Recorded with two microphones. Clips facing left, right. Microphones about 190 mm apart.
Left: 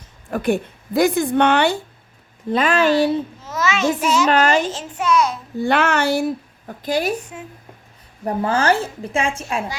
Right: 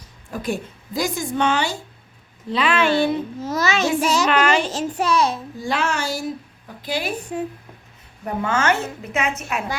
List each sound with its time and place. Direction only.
0.3 s a woman's voice: 60° left (ahead or behind)
2.5 s a woman's voice: 45° left (ahead or behind)
3.4 s a child's voice: 35° right (ahead or behind)
4.3 s a woman's voice: 40° left (ahead or behind)
4.7 s a child's voice: 40° right (ahead or behind)
5.5 s a woman's voice: 60° left (ahead or behind); by 7.1 s 45° left (ahead or behind)
7.3 s a child's voice: 35° right (ahead or behind)
8.2 s a woman's voice: 35° left (ahead or behind)